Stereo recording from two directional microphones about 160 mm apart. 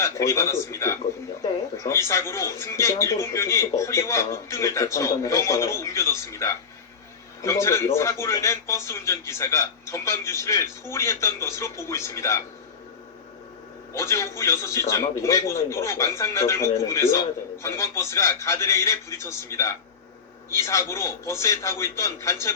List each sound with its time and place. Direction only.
0.0 s a man's voice: 15° left (ahead or behind)
2.0 s a man's voice: 15° left (ahead or behind)
13.9 s a man's voice: 15° left (ahead or behind)